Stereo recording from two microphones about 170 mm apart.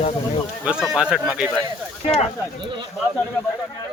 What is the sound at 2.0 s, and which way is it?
Speech, 35° left (ahead or behind).